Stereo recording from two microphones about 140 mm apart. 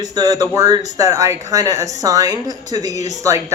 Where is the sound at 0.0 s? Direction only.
25° right (ahead or behind).